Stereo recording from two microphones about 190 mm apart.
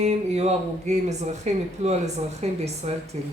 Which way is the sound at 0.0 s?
35° right (ahead or behind).